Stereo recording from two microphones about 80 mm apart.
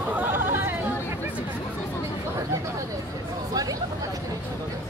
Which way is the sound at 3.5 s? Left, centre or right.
Right.